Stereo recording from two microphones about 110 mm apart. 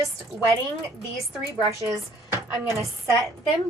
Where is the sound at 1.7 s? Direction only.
30° right (ahead or behind).